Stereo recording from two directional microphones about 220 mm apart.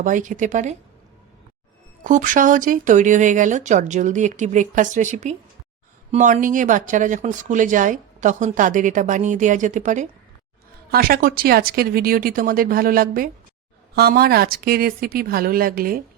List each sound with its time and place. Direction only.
0.0 s speech: 35° right (ahead or behind)
2.0 s speech: 35° right (ahead or behind)